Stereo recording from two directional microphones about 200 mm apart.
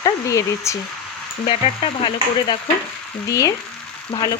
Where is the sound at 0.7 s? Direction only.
15° left (ahead or behind).